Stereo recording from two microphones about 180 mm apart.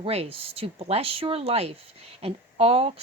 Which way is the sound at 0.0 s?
30° right (ahead or behind).